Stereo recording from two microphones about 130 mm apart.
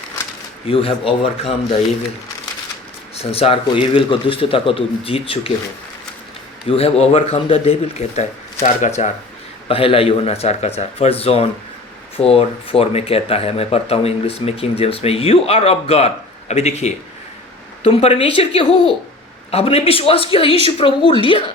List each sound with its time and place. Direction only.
0.7 s speech: 45° left (ahead or behind)
3.2 s speech: 50° left (ahead or behind)
6.7 s speech: 50° left (ahead or behind)
9.6 s speech: 45° left (ahead or behind)